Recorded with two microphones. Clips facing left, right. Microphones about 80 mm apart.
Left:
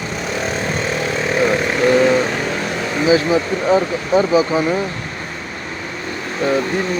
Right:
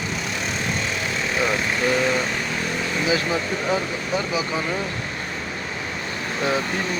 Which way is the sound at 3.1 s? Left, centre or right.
Centre.